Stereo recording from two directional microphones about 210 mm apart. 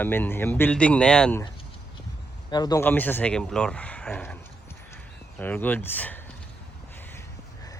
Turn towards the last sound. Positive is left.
turn(degrees=10)  # may be behind; listen again after turning